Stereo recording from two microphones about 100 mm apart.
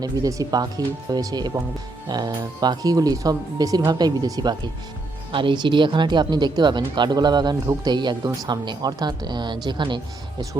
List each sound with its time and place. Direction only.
0.0 s speech: 35° right (ahead or behind)
5.3 s speech: 55° right (ahead or behind)